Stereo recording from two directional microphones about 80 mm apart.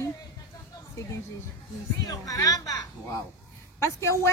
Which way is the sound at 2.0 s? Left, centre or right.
Left.